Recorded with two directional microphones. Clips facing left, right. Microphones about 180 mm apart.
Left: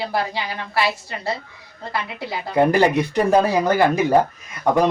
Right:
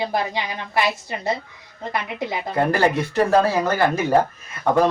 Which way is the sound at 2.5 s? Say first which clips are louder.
Left 4 dB; 15° left (ahead or behind).